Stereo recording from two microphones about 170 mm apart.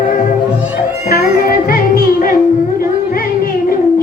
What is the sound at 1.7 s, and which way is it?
Music, 60° left (ahead or behind).